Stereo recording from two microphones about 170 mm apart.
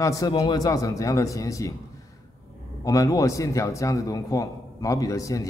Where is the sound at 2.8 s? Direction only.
20° left (ahead or behind).